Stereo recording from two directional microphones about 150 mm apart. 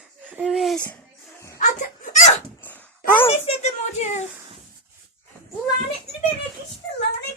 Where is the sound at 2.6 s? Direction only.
10° left (ahead or behind).